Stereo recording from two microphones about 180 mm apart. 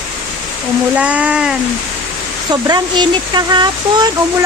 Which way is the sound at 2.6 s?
25° right (ahead or behind).